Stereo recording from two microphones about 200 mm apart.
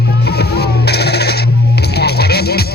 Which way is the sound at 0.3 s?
55° left (ahead or behind).